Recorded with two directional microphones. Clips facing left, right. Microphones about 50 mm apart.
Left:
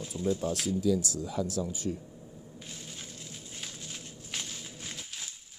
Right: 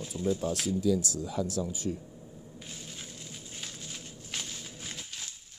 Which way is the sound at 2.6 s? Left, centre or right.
Centre.